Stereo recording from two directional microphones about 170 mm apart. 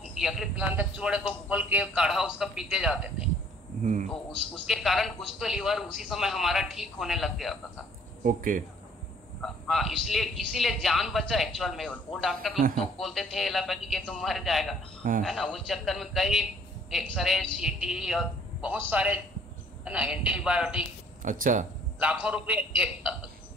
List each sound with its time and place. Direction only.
0.1 s a man's voice: centre (ahead or behind)
3.8 s speech: 45° right (ahead or behind)
4.6 s a man's voice: centre (ahead or behind)
8.2 s speech: 50° right (ahead or behind)
9.4 s a man's voice: centre (ahead or behind)
21.2 s speech: 50° right (ahead or behind)
22.0 s a man's voice: 5° right (ahead or behind)